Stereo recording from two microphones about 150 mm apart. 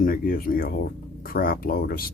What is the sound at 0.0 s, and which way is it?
Speech, 75° left (ahead or behind).